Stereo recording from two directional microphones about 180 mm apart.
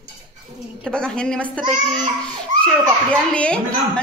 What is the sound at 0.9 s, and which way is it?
Speech, 5° left (ahead or behind).